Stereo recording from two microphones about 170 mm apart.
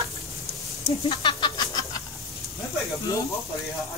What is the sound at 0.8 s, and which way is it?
Chicken, 30° left (ahead or behind).